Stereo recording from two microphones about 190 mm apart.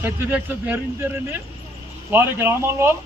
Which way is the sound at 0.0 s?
10° right (ahead or behind).